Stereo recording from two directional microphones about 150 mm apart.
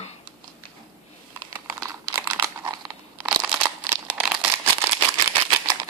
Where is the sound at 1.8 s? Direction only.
20° right (ahead or behind).